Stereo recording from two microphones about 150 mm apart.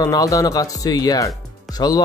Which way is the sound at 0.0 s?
25° left (ahead or behind).